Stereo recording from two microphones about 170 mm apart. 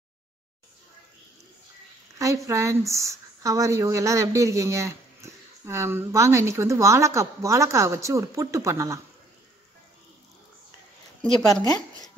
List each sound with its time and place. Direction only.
2.1 s speech: 20° right (ahead or behind)
11.2 s speech: 5° left (ahead or behind)
11.6 s a woman's voice: 20° left (ahead or behind)